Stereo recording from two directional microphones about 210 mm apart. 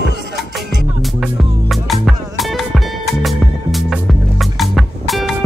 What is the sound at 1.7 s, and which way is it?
Music, centre (ahead or behind).